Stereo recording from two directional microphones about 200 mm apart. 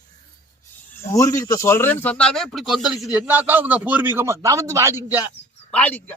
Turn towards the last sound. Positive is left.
turn(degrees=10)  # may be behind; listen again after turning